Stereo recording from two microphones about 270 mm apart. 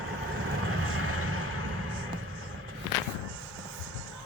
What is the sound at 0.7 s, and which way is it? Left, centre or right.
Vehicle, right.